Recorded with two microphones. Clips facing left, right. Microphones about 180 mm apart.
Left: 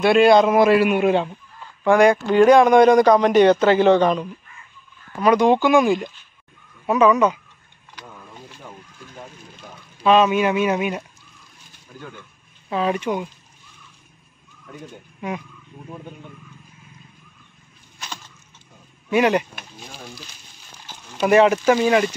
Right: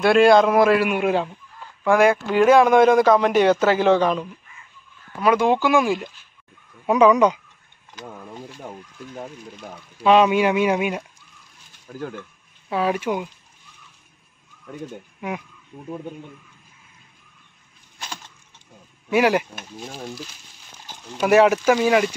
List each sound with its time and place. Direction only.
0.0 s speech: centre (ahead or behind)
6.9 s speech: 15° right (ahead or behind)
10.0 s speech: 15° right (ahead or behind)
11.9 s speech: 50° right (ahead or behind)
12.6 s speech: 10° right (ahead or behind)
15.1 s speech: 10° right (ahead or behind)
19.0 s speech: 10° right (ahead or behind)
21.2 s speech: 5° right (ahead or behind)